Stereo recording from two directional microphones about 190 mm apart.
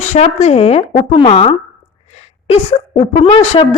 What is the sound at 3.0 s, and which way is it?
Speech, 35° left (ahead or behind).